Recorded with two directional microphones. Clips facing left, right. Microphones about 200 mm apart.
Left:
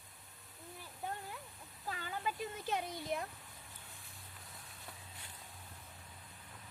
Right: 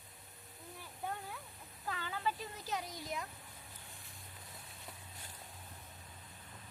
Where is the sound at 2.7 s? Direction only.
55° left (ahead or behind).